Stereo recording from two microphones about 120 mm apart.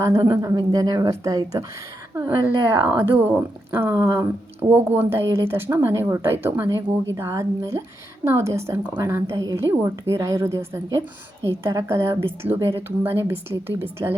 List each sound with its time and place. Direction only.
0.3 s speech: 30° right (ahead or behind)